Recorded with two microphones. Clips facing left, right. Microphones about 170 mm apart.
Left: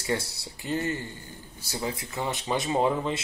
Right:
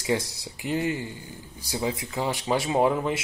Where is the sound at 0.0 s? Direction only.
15° right (ahead or behind).